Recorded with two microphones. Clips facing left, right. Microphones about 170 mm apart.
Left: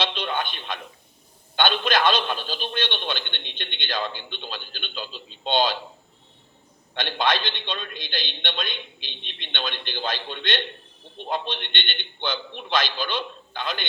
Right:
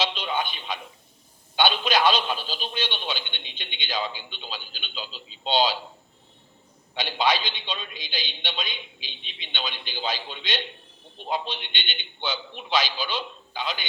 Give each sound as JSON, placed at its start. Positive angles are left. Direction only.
{"t": 0.0, "sound": "a sound", "side_deg": -5}
{"t": 1.5, "sound": "a man's voice", "side_deg": -5}
{"t": 7.1, "sound": "a man's voice", "side_deg": -5}
{"t": 7.9, "sound": "a man's voice", "side_deg": 50}
{"t": 8.4, "sound": "a man's voice", "side_deg": -5}
{"t": 9.0, "sound": "a man's voice", "side_deg": 55}
{"t": 9.6, "sound": "a man's voice", "side_deg": -5}
{"t": 11.7, "sound": "a man's voice", "side_deg": 55}
{"t": 12.2, "sound": "a man's voice", "side_deg": -5}